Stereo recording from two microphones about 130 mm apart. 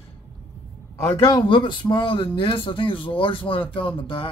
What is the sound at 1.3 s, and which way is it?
Speech, 40° left (ahead or behind).